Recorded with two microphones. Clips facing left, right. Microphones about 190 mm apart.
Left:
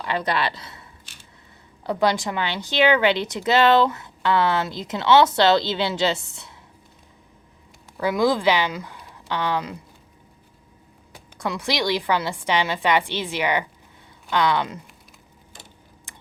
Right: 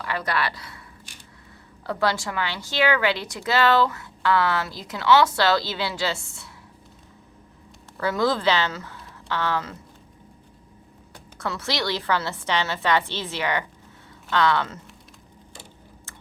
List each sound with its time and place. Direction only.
0.0 s a woman's voice: 20° left (ahead or behind)
1.8 s a woman's voice: 15° left (ahead or behind)
7.9 s speech: 15° left (ahead or behind)
11.1 s a woman's voice: 15° left (ahead or behind)